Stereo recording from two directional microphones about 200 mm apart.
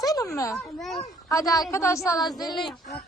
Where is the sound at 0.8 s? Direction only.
Centre (ahead or behind).